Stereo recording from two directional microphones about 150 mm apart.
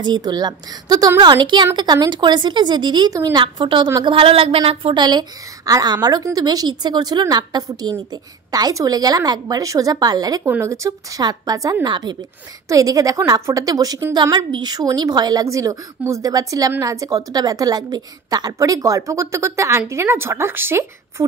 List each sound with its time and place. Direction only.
0.0 s a woman's voice: 30° right (ahead or behind)